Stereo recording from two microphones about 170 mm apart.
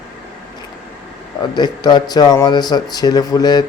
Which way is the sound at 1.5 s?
25° left (ahead or behind).